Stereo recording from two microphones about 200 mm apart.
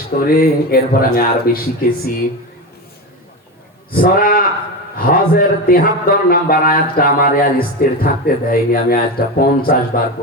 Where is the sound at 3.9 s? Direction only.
45° left (ahead or behind).